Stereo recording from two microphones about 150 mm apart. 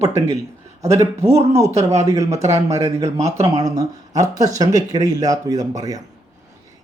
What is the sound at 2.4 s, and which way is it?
Speech, 50° right (ahead or behind).